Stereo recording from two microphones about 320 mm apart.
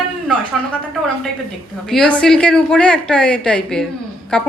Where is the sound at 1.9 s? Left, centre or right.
Centre.